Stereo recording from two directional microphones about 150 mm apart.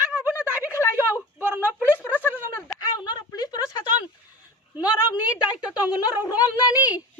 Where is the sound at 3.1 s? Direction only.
25° left (ahead or behind).